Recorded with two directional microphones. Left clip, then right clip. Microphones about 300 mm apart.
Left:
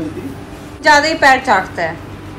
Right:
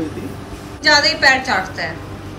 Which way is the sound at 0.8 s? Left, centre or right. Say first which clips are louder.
Left 3 dB; centre.